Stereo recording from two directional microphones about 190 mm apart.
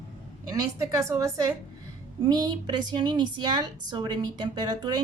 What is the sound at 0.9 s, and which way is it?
A woman's voice, 15° right (ahead or behind).